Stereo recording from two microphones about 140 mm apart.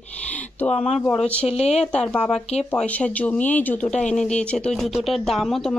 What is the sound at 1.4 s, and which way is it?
Speech, 50° left (ahead or behind).